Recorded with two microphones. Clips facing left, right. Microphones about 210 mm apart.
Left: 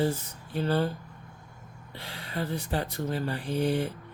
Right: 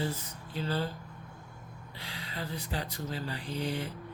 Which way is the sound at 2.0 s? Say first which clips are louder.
Left 6 dB; 55° left (ahead or behind).